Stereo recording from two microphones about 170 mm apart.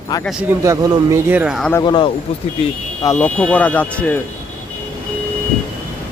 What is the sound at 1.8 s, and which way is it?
Speech, 30° left (ahead or behind).